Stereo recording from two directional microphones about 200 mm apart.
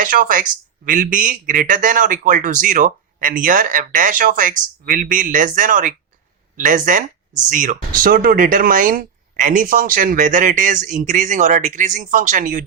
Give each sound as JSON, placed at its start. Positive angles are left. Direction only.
{"t": 0.0, "sound": "speech", "side_deg": -45}